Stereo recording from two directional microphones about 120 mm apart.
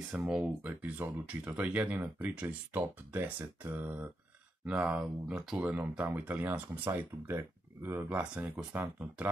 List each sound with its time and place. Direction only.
0.1 s speech: 5° right (ahead or behind)